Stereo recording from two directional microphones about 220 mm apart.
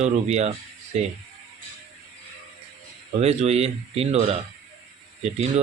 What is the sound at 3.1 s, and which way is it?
Speech, 30° right (ahead or behind).